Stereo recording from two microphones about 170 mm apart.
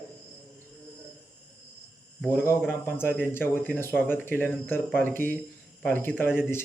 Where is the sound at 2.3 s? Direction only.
15° left (ahead or behind).